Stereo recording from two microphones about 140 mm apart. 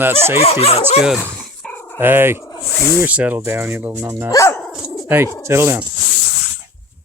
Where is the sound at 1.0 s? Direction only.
5° right (ahead or behind).